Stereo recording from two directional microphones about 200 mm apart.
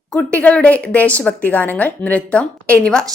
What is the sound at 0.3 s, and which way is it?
A woman's voice, 5° left (ahead or behind).